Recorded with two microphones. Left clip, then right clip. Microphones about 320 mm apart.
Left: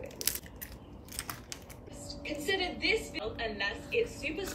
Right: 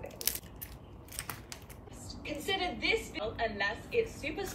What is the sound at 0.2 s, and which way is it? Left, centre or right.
Crushing, centre.